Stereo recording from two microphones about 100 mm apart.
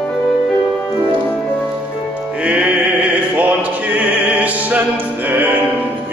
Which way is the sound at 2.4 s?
15° right (ahead or behind).